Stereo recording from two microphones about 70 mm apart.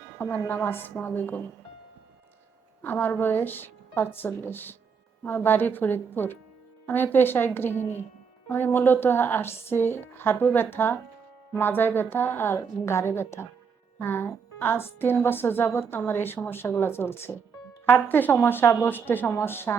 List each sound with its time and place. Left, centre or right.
0.2 s a woman's voice: left
2.8 s a woman's voice: left